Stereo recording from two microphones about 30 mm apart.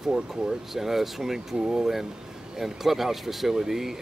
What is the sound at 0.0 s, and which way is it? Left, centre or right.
Speech, centre.